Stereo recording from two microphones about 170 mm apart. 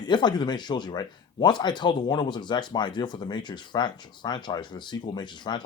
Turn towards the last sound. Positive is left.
turn(degrees=25)  # may be behind; listen again after turning